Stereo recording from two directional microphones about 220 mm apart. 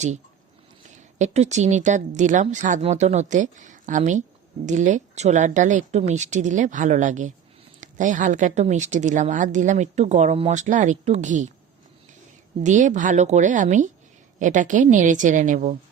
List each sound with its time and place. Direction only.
1.2 s a woman's voice: 30° right (ahead or behind)
12.6 s a woman's voice: 35° right (ahead or behind)